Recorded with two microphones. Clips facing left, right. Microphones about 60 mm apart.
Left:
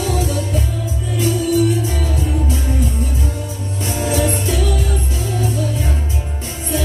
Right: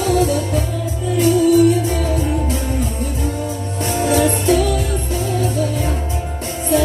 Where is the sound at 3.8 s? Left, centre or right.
Right.